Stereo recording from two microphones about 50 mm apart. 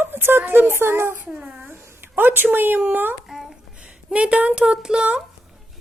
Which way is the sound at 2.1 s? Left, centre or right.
Right.